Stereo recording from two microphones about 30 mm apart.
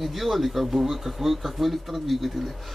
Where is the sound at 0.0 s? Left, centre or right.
Centre.